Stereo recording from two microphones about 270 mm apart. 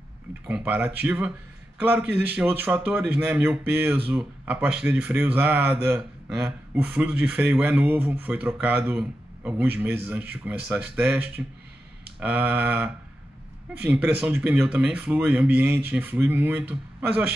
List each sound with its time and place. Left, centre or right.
0.5 s a man's voice: centre